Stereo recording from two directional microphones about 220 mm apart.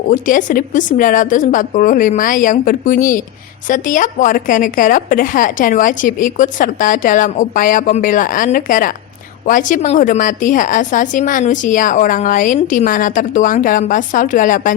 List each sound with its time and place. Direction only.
0.1 s a woman's voice: 35° left (ahead or behind)